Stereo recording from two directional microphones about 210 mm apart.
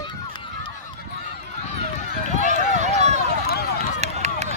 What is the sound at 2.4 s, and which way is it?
Run, 35° right (ahead or behind).